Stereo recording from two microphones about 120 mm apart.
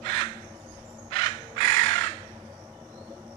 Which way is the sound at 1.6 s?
30° left (ahead or behind).